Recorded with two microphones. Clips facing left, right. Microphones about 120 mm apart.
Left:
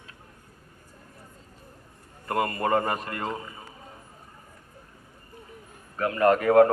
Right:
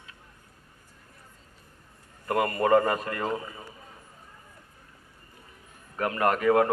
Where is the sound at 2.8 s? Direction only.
30° left (ahead or behind).